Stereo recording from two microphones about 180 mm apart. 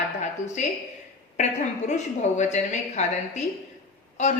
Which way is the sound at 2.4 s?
40° left (ahead or behind).